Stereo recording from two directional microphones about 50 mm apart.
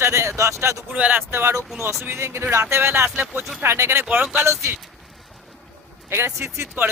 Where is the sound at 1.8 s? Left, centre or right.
Right.